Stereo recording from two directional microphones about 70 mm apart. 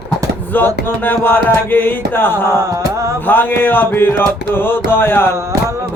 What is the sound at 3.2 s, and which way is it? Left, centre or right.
Music, left.